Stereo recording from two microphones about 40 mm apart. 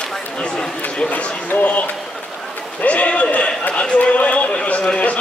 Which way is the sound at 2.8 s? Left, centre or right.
Left.